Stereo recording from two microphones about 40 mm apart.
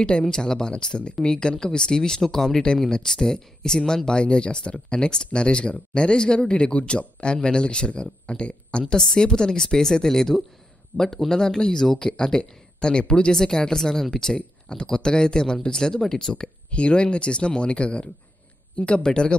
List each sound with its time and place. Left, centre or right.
0.4 s a woman's voice: centre